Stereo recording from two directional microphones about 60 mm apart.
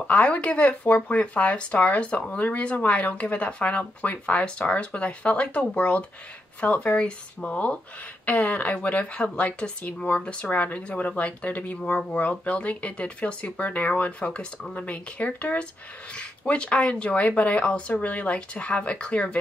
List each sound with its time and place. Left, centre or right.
0.1 s speech: left